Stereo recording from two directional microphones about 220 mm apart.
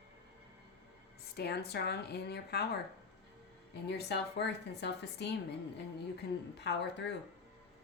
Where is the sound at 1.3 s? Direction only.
50° left (ahead or behind).